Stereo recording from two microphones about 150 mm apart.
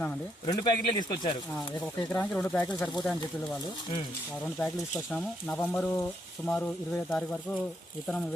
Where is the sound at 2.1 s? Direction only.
10° left (ahead or behind).